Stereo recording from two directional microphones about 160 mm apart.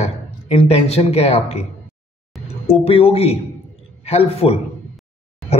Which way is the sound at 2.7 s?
35° left (ahead or behind).